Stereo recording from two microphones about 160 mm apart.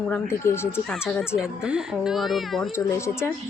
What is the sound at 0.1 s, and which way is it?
Speech, 15° left (ahead or behind).